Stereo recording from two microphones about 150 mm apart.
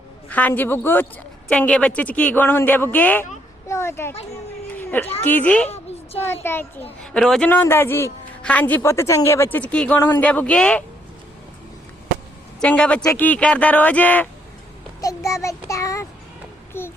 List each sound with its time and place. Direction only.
0.3 s a woman's voice: 10° left (ahead or behind)
4.7 s a sound: 10° left (ahead or behind)
5.2 s a woman's voice: 10° left (ahead or behind)
7.0 s a woman's voice: 5° left (ahead or behind)
12.5 s a man's voice: 5° left (ahead or behind)
15.0 s child singing: 20° left (ahead or behind)
16.7 s a child's voice: 15° left (ahead or behind)